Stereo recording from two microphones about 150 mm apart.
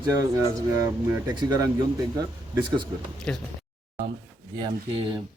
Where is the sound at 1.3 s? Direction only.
30° right (ahead or behind).